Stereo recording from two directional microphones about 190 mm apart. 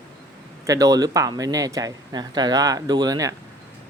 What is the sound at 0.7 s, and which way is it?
Speech, 20° right (ahead or behind).